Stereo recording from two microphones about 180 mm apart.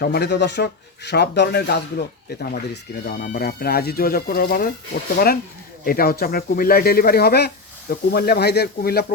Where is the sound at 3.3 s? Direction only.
55° left (ahead or behind).